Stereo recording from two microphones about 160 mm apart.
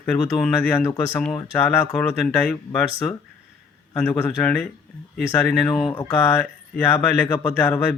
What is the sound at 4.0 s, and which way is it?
Speech, 5° left (ahead or behind).